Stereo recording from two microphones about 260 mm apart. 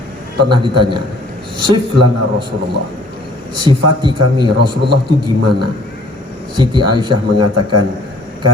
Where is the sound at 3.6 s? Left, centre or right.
Centre.